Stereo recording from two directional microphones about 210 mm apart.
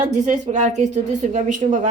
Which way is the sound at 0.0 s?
35° right (ahead or behind).